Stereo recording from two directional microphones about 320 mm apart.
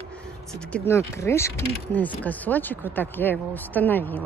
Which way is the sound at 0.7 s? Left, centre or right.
Centre.